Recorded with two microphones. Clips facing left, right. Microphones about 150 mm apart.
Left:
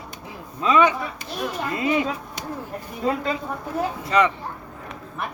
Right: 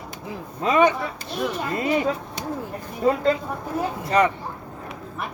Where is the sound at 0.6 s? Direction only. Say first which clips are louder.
Even; 40° right (ahead or behind).